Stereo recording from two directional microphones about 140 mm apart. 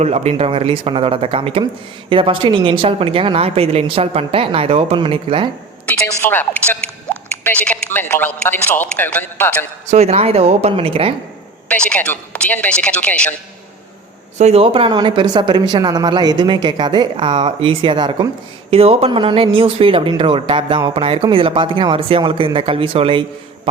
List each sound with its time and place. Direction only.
0.0 s speech: 50° right (ahead or behind)
5.8 s a woman's voice: 10° left (ahead or behind)
9.9 s speech: 50° right (ahead or behind)
11.7 s a man's voice: 10° left (ahead or behind)
14.3 s speech: 50° right (ahead or behind); by 18.3 s 35° right (ahead or behind)
18.7 s speech: 45° right (ahead or behind)